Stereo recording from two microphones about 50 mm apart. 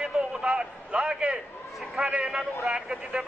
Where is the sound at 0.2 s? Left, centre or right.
Centre.